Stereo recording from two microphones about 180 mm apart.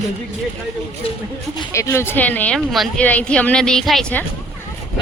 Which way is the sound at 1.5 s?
15° left (ahead or behind).